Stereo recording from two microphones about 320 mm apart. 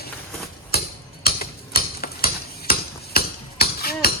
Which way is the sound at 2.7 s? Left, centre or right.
Left.